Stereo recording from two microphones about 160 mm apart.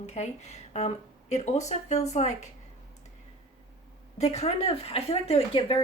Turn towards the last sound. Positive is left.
turn(degrees=35)  # may be behind; listen again after turning